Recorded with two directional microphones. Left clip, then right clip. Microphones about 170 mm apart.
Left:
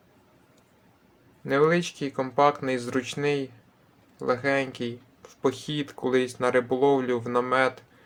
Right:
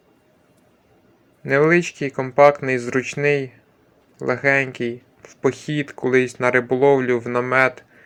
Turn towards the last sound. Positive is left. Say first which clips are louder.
# right 6 dB
turn(degrees=-25)  # may be behind; listen again after turning